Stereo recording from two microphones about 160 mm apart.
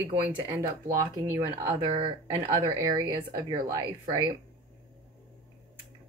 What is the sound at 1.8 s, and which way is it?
Speech, 35° right (ahead or behind).